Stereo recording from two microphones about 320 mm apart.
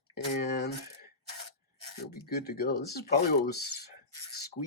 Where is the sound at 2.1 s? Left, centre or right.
Left.